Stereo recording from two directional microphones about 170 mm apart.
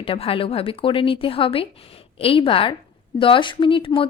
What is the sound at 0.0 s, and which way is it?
Speech, 35° left (ahead or behind).